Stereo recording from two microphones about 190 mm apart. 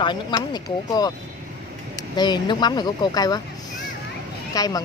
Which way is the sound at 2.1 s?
20° left (ahead or behind).